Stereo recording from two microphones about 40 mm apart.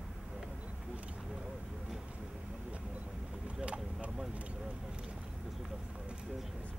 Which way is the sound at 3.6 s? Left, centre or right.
Right.